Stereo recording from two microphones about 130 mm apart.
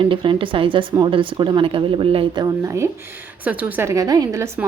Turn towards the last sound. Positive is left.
turn(degrees=-25)  # may be behind; listen again after turning